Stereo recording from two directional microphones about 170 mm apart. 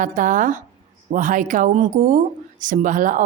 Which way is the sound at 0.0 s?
50° right (ahead or behind).